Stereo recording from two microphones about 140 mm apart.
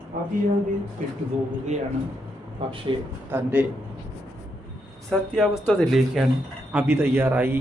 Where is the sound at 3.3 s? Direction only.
10° right (ahead or behind).